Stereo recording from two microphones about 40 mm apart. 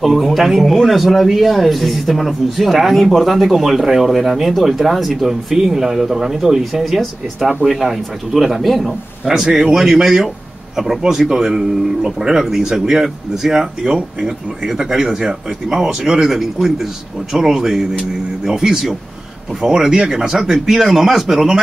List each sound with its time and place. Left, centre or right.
0.0 s speech: centre
6.8 s speech: centre
7.7 s speech: centre